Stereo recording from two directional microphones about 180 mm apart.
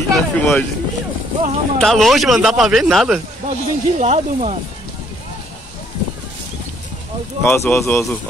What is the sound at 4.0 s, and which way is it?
Speech, 40° right (ahead or behind).